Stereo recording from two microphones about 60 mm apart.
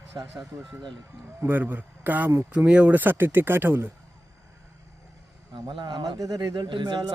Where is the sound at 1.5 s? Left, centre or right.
Right.